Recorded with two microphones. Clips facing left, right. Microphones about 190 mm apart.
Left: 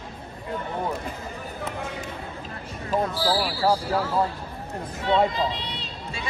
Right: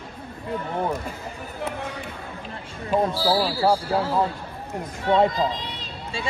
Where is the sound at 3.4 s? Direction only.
30° right (ahead or behind).